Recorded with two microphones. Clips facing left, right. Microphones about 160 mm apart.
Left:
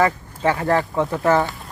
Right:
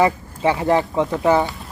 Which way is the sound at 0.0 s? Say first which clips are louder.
Right 2 dB; 15° right (ahead or behind).